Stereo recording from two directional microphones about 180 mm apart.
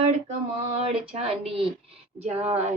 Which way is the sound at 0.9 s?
30° right (ahead or behind).